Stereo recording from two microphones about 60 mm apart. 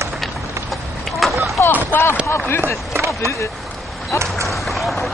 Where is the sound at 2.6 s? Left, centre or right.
Right.